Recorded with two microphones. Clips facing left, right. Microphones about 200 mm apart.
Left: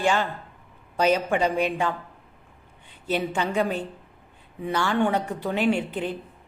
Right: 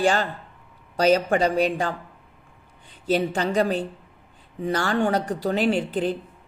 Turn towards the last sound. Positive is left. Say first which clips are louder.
# right 2 dB
turn(degrees=-35)  # may be behind; listen again after turning